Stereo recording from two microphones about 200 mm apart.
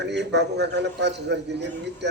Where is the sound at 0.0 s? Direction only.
60° right (ahead or behind).